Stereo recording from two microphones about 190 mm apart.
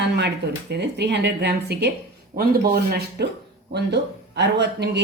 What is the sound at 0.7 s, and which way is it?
Speech, 65° right (ahead or behind).